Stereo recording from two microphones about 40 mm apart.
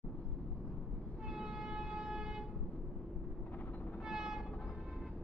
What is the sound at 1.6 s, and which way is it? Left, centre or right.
Siren, centre.